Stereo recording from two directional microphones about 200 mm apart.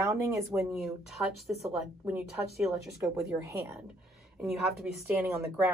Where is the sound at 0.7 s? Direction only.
Centre (ahead or behind).